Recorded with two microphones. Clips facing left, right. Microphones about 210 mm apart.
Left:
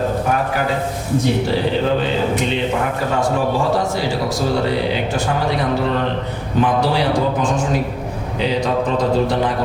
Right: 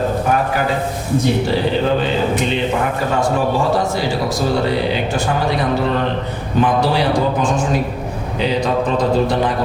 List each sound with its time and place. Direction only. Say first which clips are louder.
0.3 s a man's voice: right 2 dB; 20° right (ahead or behind)
3.4 s a man's voice: right 1 dB; 40° right (ahead or behind)
4.5 s a man's voice: right 1 dB; 15° right (ahead or behind)
6.8 s a man's voice: right 1 dB; 15° right (ahead or behind)